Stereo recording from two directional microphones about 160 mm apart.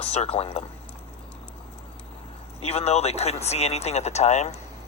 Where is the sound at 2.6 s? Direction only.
40° left (ahead or behind).